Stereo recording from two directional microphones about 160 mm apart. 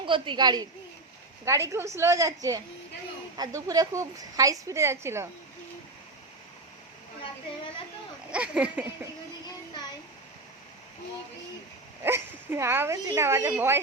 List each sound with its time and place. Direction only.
0.0 s a woman's voice: 30° right (ahead or behind); by 5.3 s 15° right (ahead or behind)
8.3 s speech: 5° right (ahead or behind)
12.0 s speech: 15° right (ahead or behind)